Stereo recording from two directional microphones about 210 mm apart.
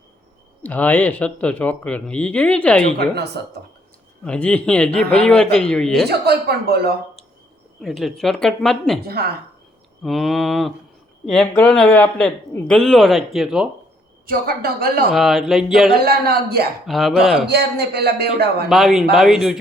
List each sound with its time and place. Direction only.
0.6 s speech: 10° left (ahead or behind)
3.0 s speech: 50° right (ahead or behind)
4.2 s speech: 5° left (ahead or behind)
6.1 s speech: 50° right (ahead or behind)
7.8 s speech: centre (ahead or behind)
9.0 s speech: 50° right (ahead or behind)
10.0 s speech: centre (ahead or behind)
14.3 s speech: 45° right (ahead or behind)
15.1 s speech: centre (ahead or behind)
16.0 s speech: 45° right (ahead or behind)
16.8 s speech: centre (ahead or behind)
17.5 s speech: 50° right (ahead or behind)
18.7 s speech: centre (ahead or behind)